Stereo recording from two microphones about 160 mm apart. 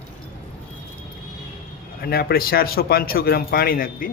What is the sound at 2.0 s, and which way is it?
Speech, 70° left (ahead or behind).